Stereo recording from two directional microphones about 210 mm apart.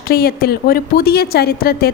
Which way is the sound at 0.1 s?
45° left (ahead or behind).